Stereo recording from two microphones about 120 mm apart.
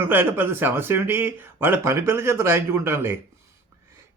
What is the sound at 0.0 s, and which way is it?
Speech, 20° right (ahead or behind).